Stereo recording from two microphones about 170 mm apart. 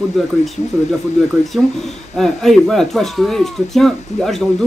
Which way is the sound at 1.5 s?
Centre (ahead or behind).